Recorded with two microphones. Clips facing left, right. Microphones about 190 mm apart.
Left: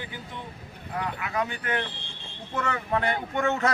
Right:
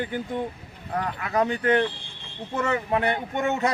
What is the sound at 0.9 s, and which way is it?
Speech, 45° right (ahead or behind).